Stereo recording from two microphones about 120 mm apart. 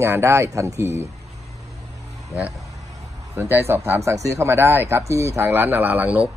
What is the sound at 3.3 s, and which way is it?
A man's voice, 20° right (ahead or behind).